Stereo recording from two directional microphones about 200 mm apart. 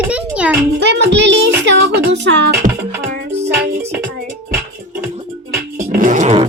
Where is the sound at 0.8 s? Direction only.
60° right (ahead or behind).